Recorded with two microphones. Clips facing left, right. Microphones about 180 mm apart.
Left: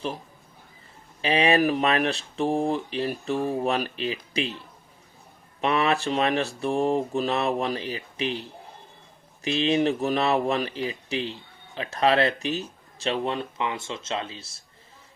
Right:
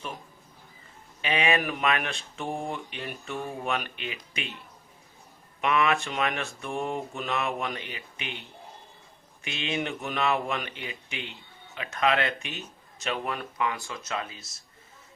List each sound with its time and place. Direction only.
1.2 s speech: 35° left (ahead or behind)